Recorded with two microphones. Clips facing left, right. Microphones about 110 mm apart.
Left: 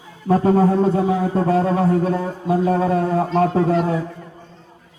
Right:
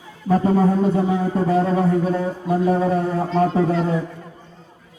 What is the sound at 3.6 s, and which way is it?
Speech, 10° left (ahead or behind).